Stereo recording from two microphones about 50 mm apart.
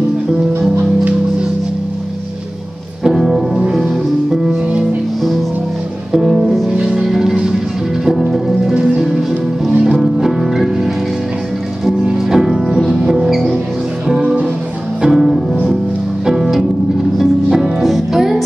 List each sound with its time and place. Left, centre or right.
3.0 s music: centre
6.1 s music: centre
8.7 s music: centre